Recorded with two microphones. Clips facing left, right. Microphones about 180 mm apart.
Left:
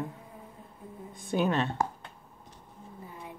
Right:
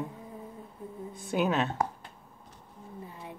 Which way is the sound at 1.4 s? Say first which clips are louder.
Even; 5° right (ahead or behind).